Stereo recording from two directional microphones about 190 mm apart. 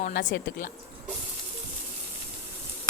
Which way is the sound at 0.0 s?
45° left (ahead or behind).